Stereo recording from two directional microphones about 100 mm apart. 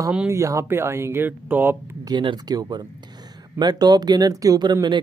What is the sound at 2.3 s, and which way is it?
Speech, 45° right (ahead or behind).